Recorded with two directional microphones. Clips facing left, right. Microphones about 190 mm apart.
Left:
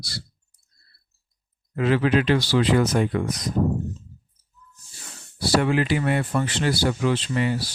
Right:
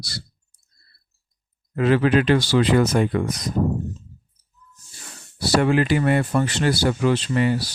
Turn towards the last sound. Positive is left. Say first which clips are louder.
# right 3 dB
turn(degrees=-50)  # may be behind; listen again after turning